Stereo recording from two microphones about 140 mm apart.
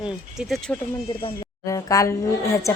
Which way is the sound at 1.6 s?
25° left (ahead or behind).